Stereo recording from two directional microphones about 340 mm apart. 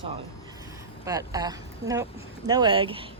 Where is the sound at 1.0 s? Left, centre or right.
Centre.